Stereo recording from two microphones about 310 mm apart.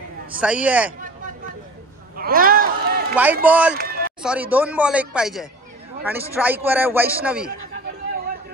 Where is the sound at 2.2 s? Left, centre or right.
Right.